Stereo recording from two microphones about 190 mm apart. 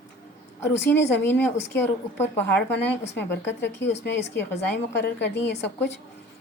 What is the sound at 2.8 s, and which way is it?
A woman's voice, 65° left (ahead or behind).